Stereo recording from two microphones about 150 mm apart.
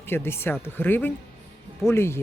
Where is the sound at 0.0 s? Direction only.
15° left (ahead or behind).